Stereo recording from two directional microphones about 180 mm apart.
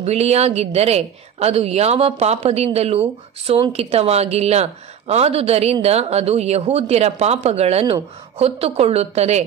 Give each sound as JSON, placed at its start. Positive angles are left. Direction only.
{"t": 0.0, "sound": "a woman's voice", "side_deg": -35}